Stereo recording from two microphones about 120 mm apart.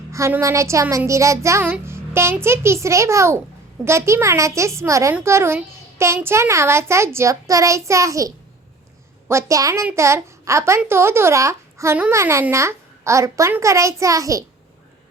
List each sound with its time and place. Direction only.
0.1 s a child's voice: 20° right (ahead or behind)
1.8 s child singing: 20° right (ahead or behind)
2.3 s a child's voice: 20° right (ahead or behind)
9.3 s a child's voice: 25° right (ahead or behind)